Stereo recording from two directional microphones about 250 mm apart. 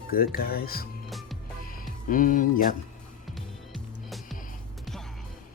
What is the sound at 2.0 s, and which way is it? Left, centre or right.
Speech, left.